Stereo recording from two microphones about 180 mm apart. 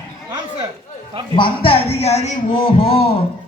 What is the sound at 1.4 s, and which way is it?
Speech, 30° left (ahead or behind).